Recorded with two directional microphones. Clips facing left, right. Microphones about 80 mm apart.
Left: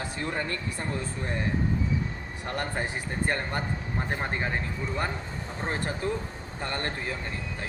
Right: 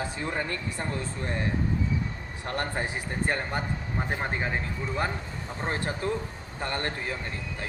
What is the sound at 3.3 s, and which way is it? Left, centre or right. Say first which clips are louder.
Speech: even; centre.